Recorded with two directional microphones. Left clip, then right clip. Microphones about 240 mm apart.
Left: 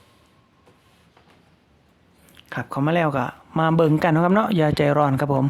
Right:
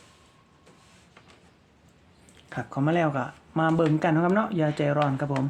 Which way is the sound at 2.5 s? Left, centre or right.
Left.